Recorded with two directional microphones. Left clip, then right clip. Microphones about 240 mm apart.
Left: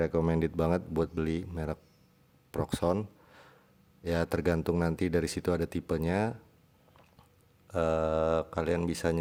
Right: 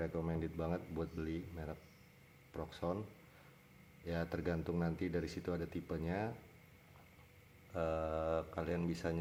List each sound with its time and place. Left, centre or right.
0.0 s speech: left
7.7 s speech: left